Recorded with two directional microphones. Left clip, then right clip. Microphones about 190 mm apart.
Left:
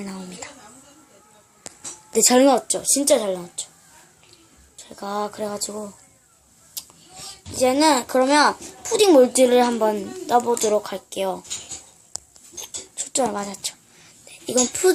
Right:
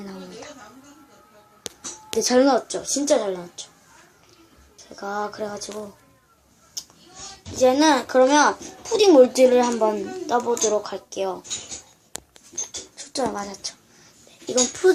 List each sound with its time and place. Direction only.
0.0 s a sound: 35° left (ahead or behind)
2.1 s a child's voice: 35° left (ahead or behind)
4.9 s a child's voice: 40° left (ahead or behind)
7.5 s a child's voice: 35° left (ahead or behind)
12.6 s a sound: 40° left (ahead or behind)
14.4 s a child's voice: 40° left (ahead or behind)